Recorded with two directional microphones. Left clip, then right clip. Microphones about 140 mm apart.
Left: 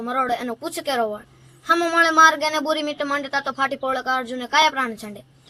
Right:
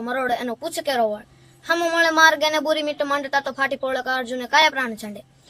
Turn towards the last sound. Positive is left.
turn(degrees=-25)  # may be behind; listen again after turning